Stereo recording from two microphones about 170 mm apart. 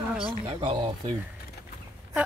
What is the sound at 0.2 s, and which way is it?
Speech, 30° right (ahead or behind).